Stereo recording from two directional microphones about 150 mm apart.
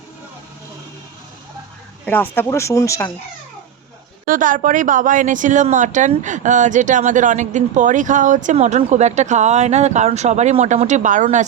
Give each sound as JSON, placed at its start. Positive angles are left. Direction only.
{"t": 2.0, "sound": "speech", "side_deg": 10}
{"t": 4.3, "sound": "a woman's voice", "side_deg": -60}